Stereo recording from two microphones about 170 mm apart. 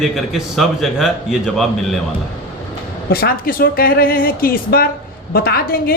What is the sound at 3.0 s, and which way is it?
A woman's voice, 65° left (ahead or behind).